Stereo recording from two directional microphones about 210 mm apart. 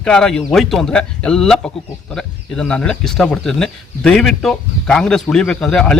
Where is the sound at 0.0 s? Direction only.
5° left (ahead or behind).